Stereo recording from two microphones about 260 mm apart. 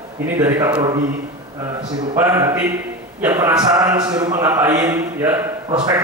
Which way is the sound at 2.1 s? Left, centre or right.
Centre.